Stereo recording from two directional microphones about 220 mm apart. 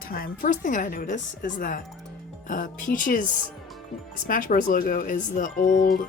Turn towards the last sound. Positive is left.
turn(degrees=40)  # may be behind; listen again after turning